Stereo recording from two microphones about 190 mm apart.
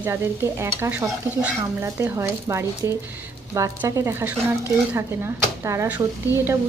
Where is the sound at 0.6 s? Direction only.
10° right (ahead or behind).